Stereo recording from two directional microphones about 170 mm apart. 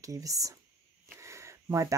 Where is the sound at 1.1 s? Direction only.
15° right (ahead or behind).